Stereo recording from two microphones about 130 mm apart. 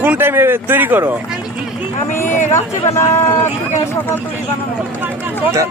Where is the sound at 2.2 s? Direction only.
70° left (ahead or behind).